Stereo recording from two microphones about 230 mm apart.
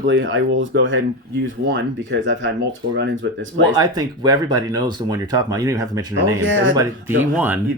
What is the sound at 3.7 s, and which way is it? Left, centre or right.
Speech, centre.